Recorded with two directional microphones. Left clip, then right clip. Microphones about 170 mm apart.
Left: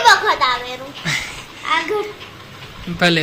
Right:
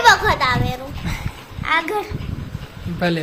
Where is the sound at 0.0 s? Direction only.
25° right (ahead or behind).